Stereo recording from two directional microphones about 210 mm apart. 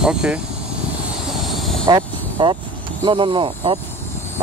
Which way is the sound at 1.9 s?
20° right (ahead or behind).